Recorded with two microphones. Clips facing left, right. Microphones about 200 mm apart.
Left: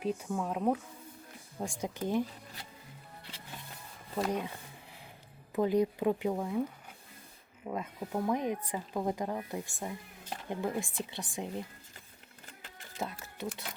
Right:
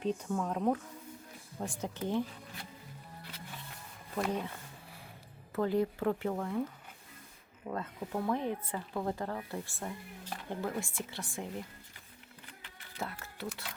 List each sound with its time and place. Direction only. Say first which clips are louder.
0.0 s speech: even; 5° left (ahead or behind)
4.1 s a sound: left 1 dB; 15° left (ahead or behind)
5.5 s speech: left 2 dB; 15° left (ahead or behind)
13.0 s speech: left 2 dB; 20° left (ahead or behind)